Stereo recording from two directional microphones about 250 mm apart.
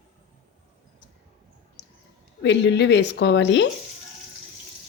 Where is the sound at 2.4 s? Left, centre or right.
Left.